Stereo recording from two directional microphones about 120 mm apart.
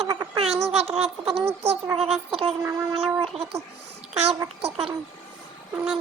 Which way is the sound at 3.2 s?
55° right (ahead or behind).